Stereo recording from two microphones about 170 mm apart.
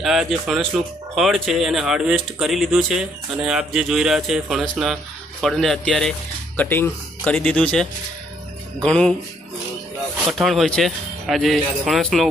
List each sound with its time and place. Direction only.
0.0 s speech: centre (ahead or behind)
10.2 s speech: centre (ahead or behind)